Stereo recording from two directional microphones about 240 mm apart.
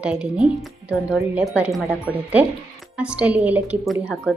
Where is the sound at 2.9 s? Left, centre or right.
Centre.